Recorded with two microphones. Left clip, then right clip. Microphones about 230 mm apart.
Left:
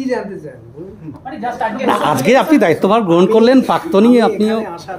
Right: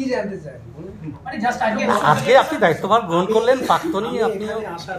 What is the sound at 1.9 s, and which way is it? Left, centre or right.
Speech, left.